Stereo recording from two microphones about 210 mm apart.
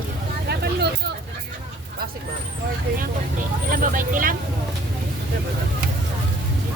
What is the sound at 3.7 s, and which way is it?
Vehicle, 40° right (ahead or behind).